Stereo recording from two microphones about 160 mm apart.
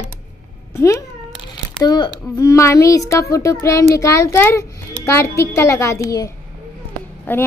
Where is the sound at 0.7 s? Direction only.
20° left (ahead or behind).